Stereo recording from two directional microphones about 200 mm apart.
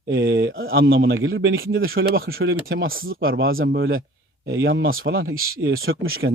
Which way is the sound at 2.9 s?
45° right (ahead or behind).